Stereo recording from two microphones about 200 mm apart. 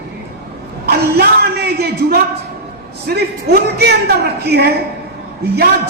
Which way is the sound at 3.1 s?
55° right (ahead or behind).